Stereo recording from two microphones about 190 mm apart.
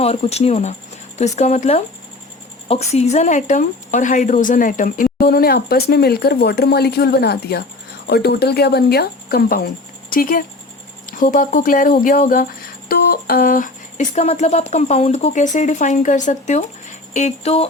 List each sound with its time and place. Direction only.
0.0 s speech: 30° left (ahead or behind)